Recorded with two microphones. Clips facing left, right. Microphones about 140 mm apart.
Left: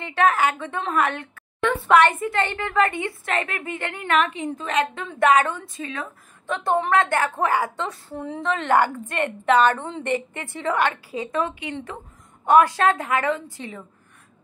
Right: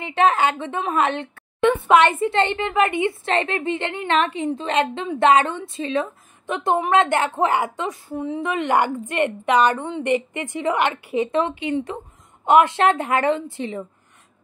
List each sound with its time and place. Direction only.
0.0 s a woman's voice: 20° right (ahead or behind)